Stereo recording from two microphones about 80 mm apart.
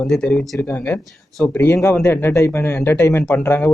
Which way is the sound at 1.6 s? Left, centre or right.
Left.